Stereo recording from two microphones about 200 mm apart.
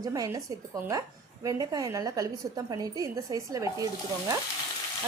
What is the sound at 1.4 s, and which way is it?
A woman's voice, 15° right (ahead or behind).